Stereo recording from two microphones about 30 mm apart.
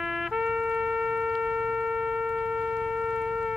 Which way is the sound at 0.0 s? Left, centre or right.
Centre.